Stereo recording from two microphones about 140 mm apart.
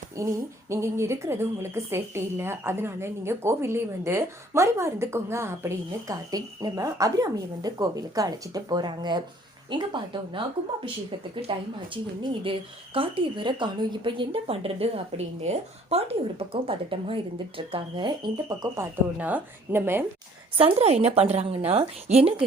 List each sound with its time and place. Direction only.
0.2 s a sound: 20° right (ahead or behind)
0.7 s a woman's voice: 20° right (ahead or behind); by 10.4 s 35° right (ahead or behind)
12.2 s a woman's voice: 40° right (ahead or behind)
19.2 s a woman's voice: 15° right (ahead or behind)
20.6 s a woman's voice: 45° right (ahead or behind)